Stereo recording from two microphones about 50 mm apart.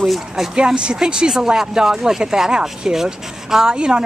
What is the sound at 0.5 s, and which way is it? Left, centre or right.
Speech, centre.